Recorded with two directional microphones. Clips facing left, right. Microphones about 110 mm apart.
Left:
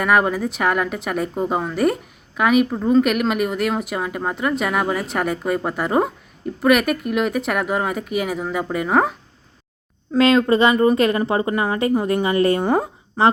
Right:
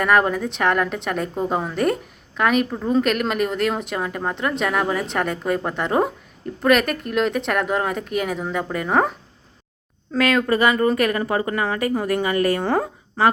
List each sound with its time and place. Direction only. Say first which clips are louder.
0.0 s a woman's voice: even; 5° left (ahead or behind)
10.2 s a woman's voice: left 4 dB; 25° left (ahead or behind)